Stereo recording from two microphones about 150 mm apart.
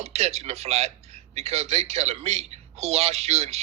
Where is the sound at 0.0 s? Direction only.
45° right (ahead or behind).